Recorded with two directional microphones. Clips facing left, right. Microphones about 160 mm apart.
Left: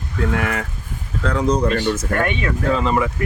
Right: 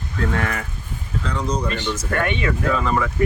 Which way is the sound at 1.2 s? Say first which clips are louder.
Left 7 dB; 55° left (ahead or behind).